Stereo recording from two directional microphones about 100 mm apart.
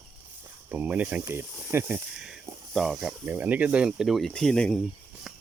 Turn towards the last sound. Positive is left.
turn(degrees=5)  # may be behind; listen again after turning